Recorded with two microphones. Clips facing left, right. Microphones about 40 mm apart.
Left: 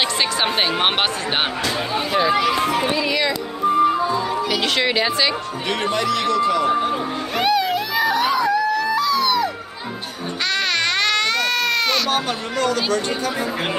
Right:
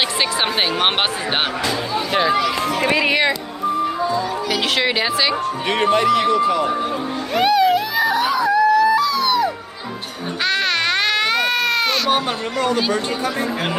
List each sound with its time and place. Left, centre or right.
0.2 s speech: centre
2.9 s speech: right
4.5 s a woman's voice: centre
5.7 s speech: right
7.3 s music: centre
10.4 s baby cry: centre
12.1 s speech: centre